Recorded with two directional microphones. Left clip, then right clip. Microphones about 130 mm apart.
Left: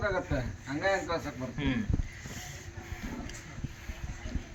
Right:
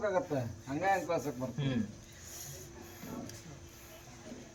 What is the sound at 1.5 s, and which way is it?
Speech, 35° right (ahead or behind).